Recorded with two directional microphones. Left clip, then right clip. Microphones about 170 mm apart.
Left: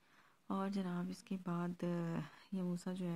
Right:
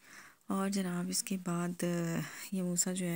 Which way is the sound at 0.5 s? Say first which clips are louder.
Right 6 dB; 25° right (ahead or behind).